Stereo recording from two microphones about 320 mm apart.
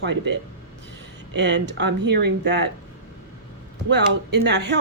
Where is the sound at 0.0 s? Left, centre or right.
Right.